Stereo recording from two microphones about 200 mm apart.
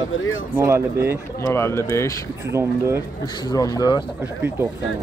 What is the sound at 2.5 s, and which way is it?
Speech, 15° right (ahead or behind).